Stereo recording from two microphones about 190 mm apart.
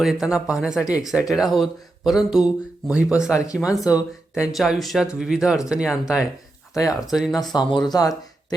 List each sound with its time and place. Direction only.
0.0 s speech: 5° right (ahead or behind)
3.3 s speech: 15° left (ahead or behind)
3.9 s speech: 5° right (ahead or behind)
7.5 s speech: 25° left (ahead or behind)